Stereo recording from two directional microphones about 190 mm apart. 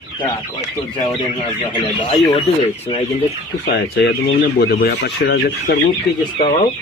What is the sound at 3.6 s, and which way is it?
Speech, 60° left (ahead or behind).